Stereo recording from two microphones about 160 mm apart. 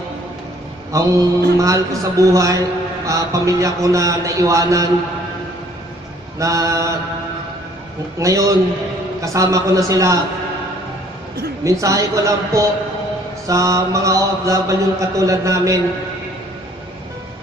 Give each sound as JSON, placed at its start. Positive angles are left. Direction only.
{"t": 0.9, "sound": "mantra", "side_deg": -20}
{"t": 6.4, "sound": "mantra", "side_deg": -20}
{"t": 8.2, "sound": "mantra", "side_deg": -20}
{"t": 11.6, "sound": "mantra", "side_deg": -20}